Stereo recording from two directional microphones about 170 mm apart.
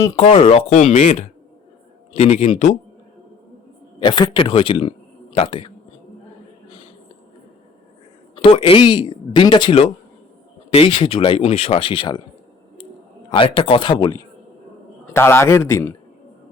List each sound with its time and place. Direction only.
0.7 s speech: 40° left (ahead or behind)
4.0 s a man's voice: 25° left (ahead or behind)
8.4 s speech: 35° left (ahead or behind)
13.3 s speech: 30° left (ahead or behind)
15.1 s a man's voice: 15° left (ahead or behind)